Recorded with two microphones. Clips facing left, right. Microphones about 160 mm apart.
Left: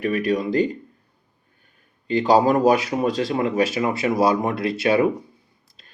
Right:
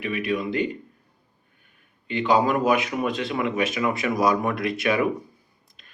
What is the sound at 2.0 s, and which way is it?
Speech, 35° left (ahead or behind).